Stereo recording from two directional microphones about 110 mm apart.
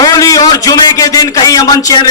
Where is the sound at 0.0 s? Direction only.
30° left (ahead or behind).